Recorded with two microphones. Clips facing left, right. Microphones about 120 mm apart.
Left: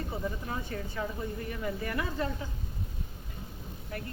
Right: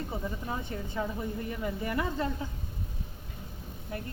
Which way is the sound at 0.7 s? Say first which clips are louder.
Right 2 dB; 20° right (ahead or behind).